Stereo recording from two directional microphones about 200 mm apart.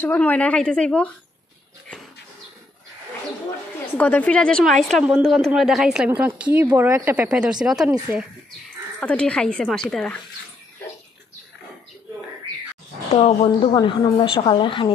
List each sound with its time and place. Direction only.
0.0 s speech: 10° left (ahead or behind)
3.9 s a woman's voice: 10° left (ahead or behind)
9.0 s a woman's voice: 5° left (ahead or behind)
13.1 s a woman's voice: 30° left (ahead or behind)